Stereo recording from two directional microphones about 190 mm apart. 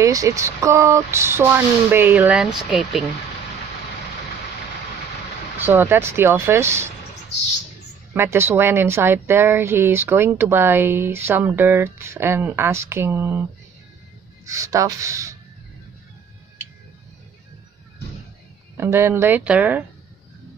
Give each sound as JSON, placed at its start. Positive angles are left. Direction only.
{"t": 0.0, "sound": "speech", "side_deg": -15}
{"t": 5.6, "sound": "speech", "side_deg": -10}
{"t": 8.1, "sound": "speech", "side_deg": -10}
{"t": 18.8, "sound": "speech", "side_deg": -10}